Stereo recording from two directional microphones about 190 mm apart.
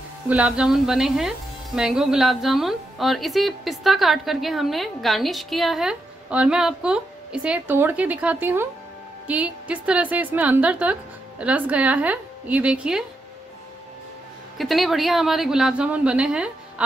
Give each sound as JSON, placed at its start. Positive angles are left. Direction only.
{"t": 0.3, "sound": "a woman's voice", "side_deg": -5}
{"t": 14.6, "sound": "a woman's voice", "side_deg": 0}